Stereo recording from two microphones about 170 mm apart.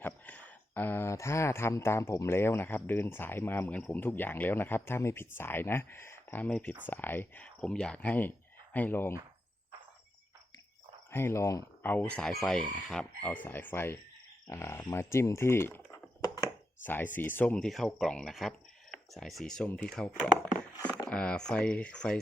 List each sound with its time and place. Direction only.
0.0 s speech: 10° left (ahead or behind)
11.1 s speech: 15° left (ahead or behind)
20.7 s a sound: 20° left (ahead or behind)
21.1 s speech: 5° left (ahead or behind)